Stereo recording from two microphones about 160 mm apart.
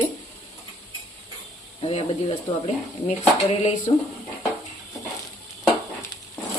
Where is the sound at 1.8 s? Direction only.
35° left (ahead or behind).